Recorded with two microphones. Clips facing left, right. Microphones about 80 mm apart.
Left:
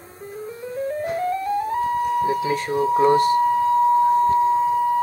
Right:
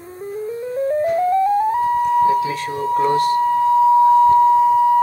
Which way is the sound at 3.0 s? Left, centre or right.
Centre.